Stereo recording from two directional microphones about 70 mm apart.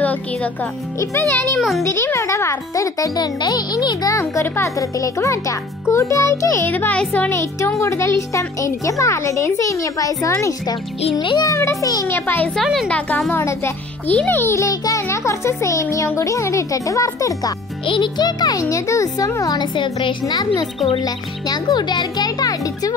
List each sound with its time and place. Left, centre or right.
0.0 s speech: left
1.3 s a child's voice: left
3.2 s a child's voice: left
6.6 s a child's voice: left
7.8 s a child's voice: left
10.7 s a child's voice: left
11.8 s a woman's voice: left
12.1 s speech: left
12.8 s speech: centre
13.3 s speech: left
14.0 s a child's voice: left
14.5 s a child's voice: left
18.0 s a child's voice: left
18.6 s a child's voice: left